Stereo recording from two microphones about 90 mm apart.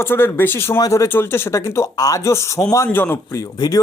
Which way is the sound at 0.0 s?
25° left (ahead or behind).